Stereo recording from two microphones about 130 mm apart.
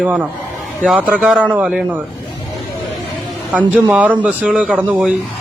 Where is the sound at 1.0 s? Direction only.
10° right (ahead or behind).